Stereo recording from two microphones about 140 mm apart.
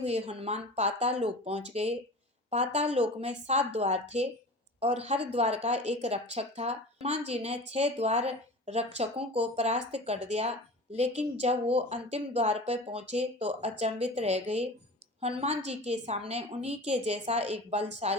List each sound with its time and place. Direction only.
0.0 s speech: 50° right (ahead or behind)